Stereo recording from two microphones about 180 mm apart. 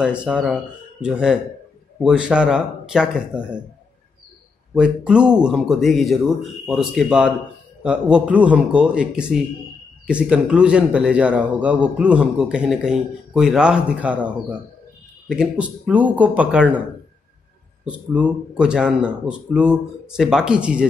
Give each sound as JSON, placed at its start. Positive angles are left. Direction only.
{"t": 0.0, "sound": "speech", "side_deg": -5}
{"t": 4.7, "sound": "a man's voice", "side_deg": -5}
{"t": 17.8, "sound": "speech", "side_deg": -5}